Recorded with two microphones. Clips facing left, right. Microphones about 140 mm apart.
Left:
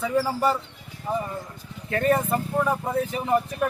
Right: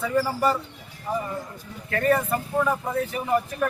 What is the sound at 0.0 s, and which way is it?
A man's voice, 20° left (ahead or behind).